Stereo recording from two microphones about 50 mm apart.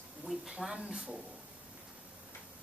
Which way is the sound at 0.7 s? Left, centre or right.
Centre.